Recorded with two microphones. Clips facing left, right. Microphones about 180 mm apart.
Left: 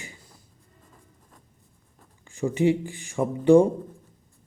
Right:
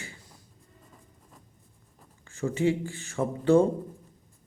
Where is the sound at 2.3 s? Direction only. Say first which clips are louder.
Left 4 dB; 15° left (ahead or behind).